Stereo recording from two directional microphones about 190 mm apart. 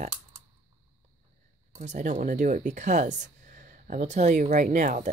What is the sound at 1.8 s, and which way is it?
Speech, 40° right (ahead or behind).